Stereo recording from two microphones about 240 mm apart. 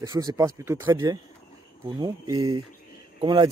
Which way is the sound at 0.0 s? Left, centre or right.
Centre.